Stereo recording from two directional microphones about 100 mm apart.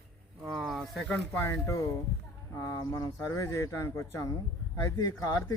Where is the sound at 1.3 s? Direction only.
30° left (ahead or behind).